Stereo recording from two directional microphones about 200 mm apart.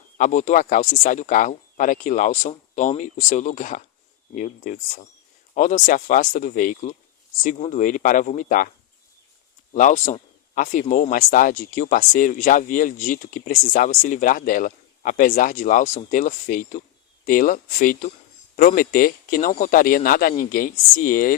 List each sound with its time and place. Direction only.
0.2 s speech: 35° left (ahead or behind)
9.7 s speech: 40° left (ahead or behind)